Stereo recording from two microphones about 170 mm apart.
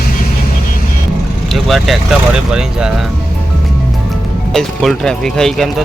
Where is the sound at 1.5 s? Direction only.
Centre (ahead or behind).